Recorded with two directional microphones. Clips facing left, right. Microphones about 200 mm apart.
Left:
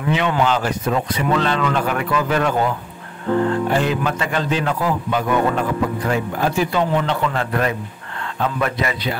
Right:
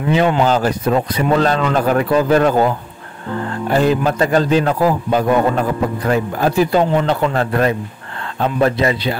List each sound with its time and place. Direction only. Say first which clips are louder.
0.3 s a man's voice: right 4 dB; 35° right (ahead or behind)
3.7 s a man's voice: right 5 dB; 40° right (ahead or behind)